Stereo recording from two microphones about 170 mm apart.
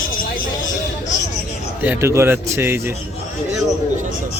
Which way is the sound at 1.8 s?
10° right (ahead or behind).